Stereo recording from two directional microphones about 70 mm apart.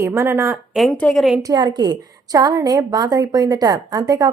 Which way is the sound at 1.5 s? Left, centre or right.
Right.